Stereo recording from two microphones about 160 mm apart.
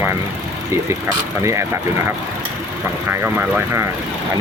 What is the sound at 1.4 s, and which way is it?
Speech, 20° right (ahead or behind).